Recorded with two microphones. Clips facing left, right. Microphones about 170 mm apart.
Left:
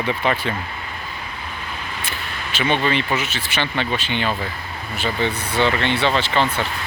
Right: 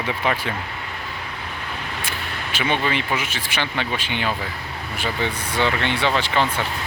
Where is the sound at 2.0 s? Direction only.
10° right (ahead or behind).